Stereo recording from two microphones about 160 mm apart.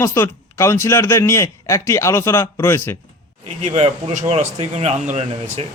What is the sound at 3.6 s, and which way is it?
Speech, 45° right (ahead or behind).